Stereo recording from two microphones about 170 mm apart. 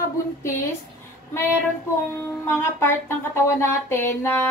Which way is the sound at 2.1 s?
15° left (ahead or behind).